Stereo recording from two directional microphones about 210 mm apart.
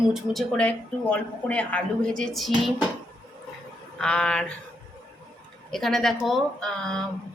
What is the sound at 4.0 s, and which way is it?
Speech, 5° left (ahead or behind).